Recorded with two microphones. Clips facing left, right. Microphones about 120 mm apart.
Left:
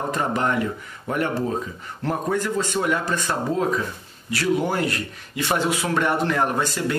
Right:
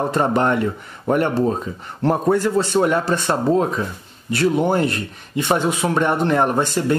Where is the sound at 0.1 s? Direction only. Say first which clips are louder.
Right 3 dB; 30° right (ahead or behind).